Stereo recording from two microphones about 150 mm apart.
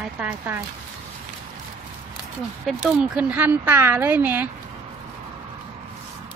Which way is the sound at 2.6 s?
5° right (ahead or behind).